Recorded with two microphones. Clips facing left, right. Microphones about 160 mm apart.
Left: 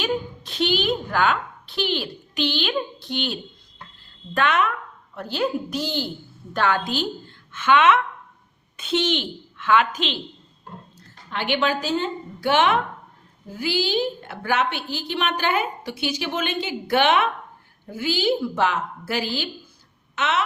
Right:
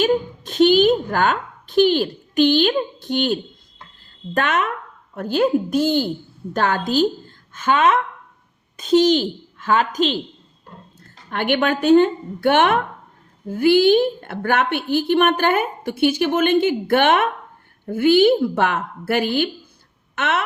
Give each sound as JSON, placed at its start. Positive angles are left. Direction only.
{"t": 0.0, "sound": "a woman's voice", "side_deg": -45}
{"t": 4.4, "sound": "a woman's voice", "side_deg": -45}